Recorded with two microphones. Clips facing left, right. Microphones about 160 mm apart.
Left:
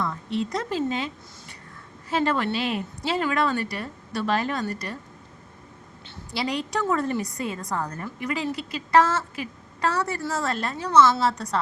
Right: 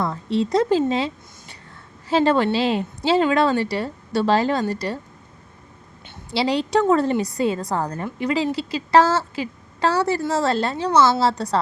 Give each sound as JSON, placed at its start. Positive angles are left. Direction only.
{"t": 0.0, "sound": "a woman's voice", "side_deg": -35}
{"t": 2.0, "sound": "a woman's voice", "side_deg": -30}
{"t": 6.3, "sound": "a woman's voice", "side_deg": -30}